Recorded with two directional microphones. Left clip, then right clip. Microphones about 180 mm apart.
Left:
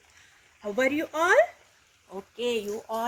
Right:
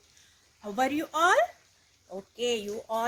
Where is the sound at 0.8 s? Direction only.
30° right (ahead or behind).